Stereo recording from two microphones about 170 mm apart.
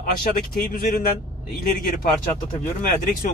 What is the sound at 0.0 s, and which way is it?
Speech, 55° left (ahead or behind).